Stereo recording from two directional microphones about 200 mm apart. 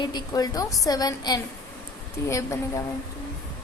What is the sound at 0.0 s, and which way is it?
A woman's voice, 20° left (ahead or behind).